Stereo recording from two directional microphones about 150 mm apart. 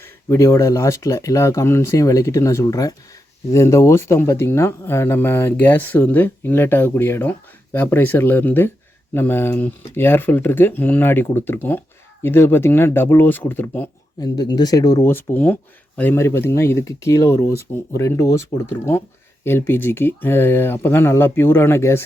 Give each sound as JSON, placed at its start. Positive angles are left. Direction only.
{"t": 0.0, "sound": "speech", "side_deg": 20}
{"t": 14.2, "sound": "speech", "side_deg": 25}